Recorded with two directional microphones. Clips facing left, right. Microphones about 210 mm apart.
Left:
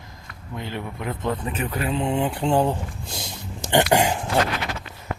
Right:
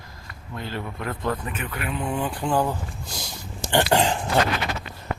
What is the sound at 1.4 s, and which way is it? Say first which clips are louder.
Speech: left 5 dB; 35° left (ahead or behind).